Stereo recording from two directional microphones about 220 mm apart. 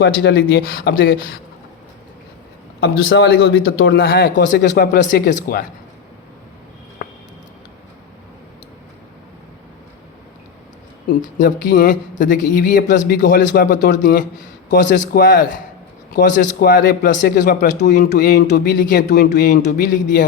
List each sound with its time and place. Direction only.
0.0 s speech: 50° left (ahead or behind)
3.1 s a man's voice: 65° left (ahead or behind)
3.9 s speech: 45° left (ahead or behind)
7.0 s a sound: 40° left (ahead or behind)
11.3 s speech: 40° left (ahead or behind)